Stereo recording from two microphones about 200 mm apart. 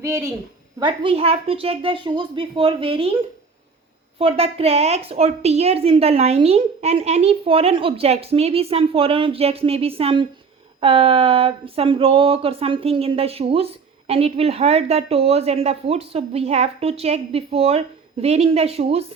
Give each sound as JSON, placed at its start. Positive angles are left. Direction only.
{"t": 0.0, "sound": "a woman's voice", "side_deg": -15}
{"t": 0.8, "sound": "a woman's voice", "side_deg": -25}
{"t": 4.2, "sound": "a woman's voice", "side_deg": -30}